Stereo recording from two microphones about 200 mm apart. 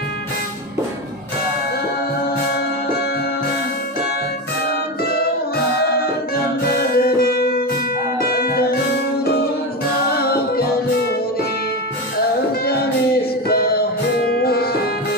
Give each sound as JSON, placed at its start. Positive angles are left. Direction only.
{"t": 6.3, "sound": "music", "side_deg": 50}
{"t": 10.2, "sound": "music", "side_deg": 50}
{"t": 13.5, "sound": "music", "side_deg": 50}